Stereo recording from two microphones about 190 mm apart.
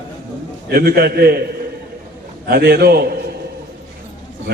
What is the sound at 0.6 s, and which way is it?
Speech, 55° right (ahead or behind).